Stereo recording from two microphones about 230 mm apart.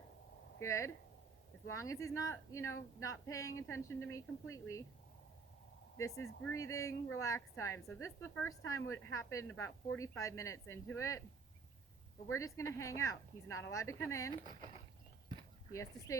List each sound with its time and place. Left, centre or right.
0.6 s a woman's voice: centre
6.1 s speech: left
6.6 s a woman's voice: centre
12.4 s a woman's voice: centre
15.7 s a woman's voice: centre